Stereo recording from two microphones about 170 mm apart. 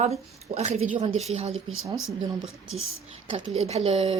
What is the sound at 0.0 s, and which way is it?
A woman's voice, 40° right (ahead or behind).